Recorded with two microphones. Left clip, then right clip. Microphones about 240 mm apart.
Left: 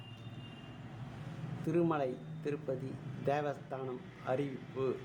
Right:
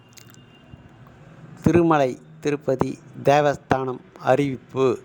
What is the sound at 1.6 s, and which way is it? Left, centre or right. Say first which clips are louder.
A man's voice: right 15 dB; right.